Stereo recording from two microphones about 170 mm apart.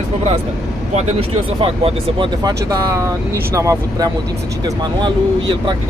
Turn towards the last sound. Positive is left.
turn(degrees=-20)  # may be behind; listen again after turning